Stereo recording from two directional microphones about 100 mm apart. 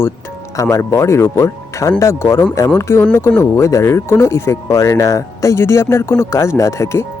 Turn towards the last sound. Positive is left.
turn(degrees=30)  # may be behind; listen again after turning